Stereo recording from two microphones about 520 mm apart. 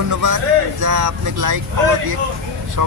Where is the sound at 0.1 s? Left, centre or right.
Right.